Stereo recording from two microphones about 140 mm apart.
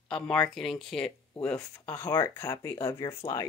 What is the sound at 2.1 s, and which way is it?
Speech, 25° left (ahead or behind).